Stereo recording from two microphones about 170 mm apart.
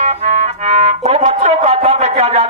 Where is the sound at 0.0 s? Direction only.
40° right (ahead or behind).